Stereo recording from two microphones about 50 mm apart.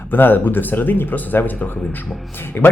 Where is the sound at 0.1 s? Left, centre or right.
Left.